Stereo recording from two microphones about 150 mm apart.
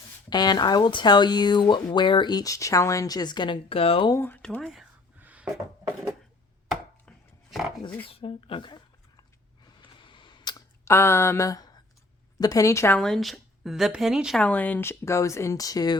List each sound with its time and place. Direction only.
0.3 s speech: 30° left (ahead or behind)
4.1 s speech: 15° left (ahead or behind)
5.2 s a sound: 10° right (ahead or behind)
8.0 s speech: 35° left (ahead or behind)
9.8 s a sound: 35° left (ahead or behind)
10.8 s a sound: 15° left (ahead or behind)
12.4 s speech: 25° left (ahead or behind)
13.0 s a woman's voice: centre (ahead or behind)
14.4 s speech: 10° left (ahead or behind)